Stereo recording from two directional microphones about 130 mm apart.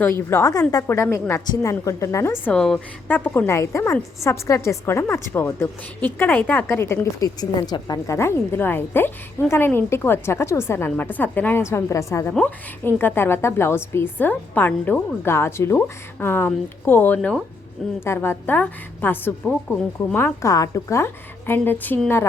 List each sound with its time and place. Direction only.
0.3 s a woman's voice: 20° left (ahead or behind)
2.5 s a woman's voice: 5° left (ahead or behind); by 12.3 s 20° left (ahead or behind)
12.3 s a woman's voice: 10° left (ahead or behind)
17.2 s speech: centre (ahead or behind)
18.0 s a woman's voice: 20° left (ahead or behind)